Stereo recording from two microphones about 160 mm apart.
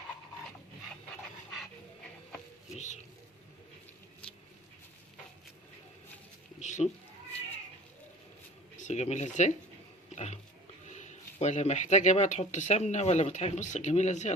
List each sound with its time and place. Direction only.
2.7 s speech: 45° left (ahead or behind)
6.6 s a sound: 50° left (ahead or behind)
8.8 s speech: 45° left (ahead or behind)
10.8 s speech: 45° left (ahead or behind)